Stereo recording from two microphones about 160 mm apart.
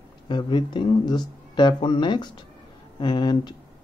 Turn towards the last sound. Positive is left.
turn(degrees=30)  # may be behind; listen again after turning